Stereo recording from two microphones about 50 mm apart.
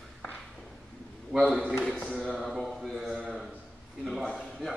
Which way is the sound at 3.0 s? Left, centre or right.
Centre.